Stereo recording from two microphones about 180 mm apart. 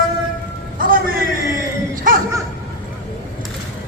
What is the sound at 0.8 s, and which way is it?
Music, 50° right (ahead or behind).